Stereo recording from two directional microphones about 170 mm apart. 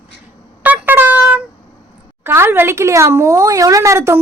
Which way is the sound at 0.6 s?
10° right (ahead or behind).